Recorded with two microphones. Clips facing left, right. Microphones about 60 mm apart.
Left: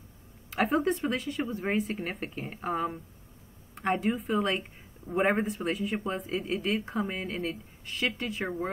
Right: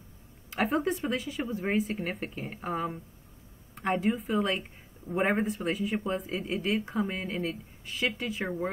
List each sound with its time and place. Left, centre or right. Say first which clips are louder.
0.5 s speech: left 2 dB; centre